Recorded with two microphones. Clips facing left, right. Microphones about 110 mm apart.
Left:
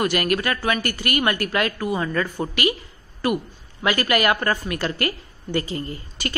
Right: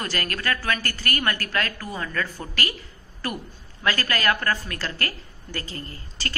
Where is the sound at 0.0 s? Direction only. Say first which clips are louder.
Left 7 dB; 20° left (ahead or behind).